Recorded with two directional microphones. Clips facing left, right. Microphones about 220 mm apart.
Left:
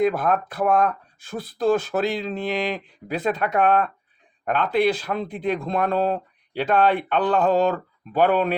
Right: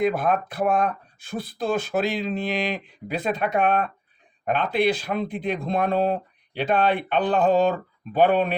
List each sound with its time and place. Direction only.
0.2 s speech: 15° right (ahead or behind)